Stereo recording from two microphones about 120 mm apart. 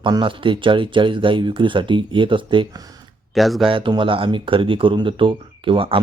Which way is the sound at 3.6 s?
45° right (ahead or behind).